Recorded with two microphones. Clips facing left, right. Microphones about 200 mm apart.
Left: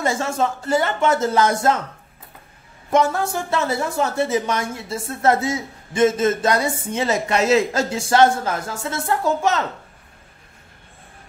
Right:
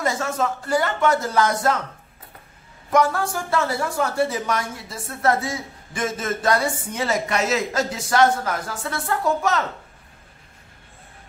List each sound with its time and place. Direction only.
0.0 s a woman's voice: 25° left (ahead or behind)
2.9 s a woman's voice: 25° left (ahead or behind)